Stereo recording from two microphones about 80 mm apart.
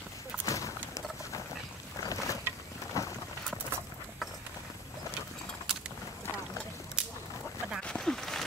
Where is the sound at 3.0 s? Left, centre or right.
Left.